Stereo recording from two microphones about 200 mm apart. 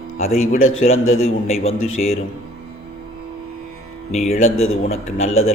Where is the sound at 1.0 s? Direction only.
90° left.